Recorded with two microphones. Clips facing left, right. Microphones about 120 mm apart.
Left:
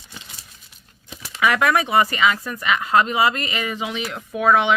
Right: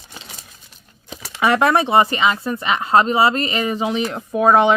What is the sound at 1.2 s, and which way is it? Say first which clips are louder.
Speech: right 3 dB; 30° right (ahead or behind).